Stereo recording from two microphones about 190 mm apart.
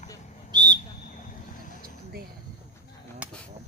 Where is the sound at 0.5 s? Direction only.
20° right (ahead or behind).